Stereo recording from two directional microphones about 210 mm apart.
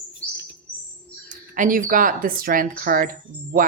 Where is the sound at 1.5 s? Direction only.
40° right (ahead or behind).